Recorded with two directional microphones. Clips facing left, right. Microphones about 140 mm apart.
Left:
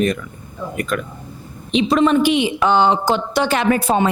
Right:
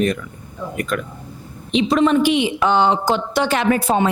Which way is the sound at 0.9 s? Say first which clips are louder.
Left 1 dB; 20° left (ahead or behind).